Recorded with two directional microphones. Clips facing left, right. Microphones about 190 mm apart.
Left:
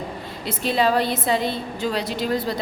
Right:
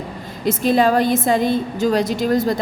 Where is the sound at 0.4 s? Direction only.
45° right (ahead or behind).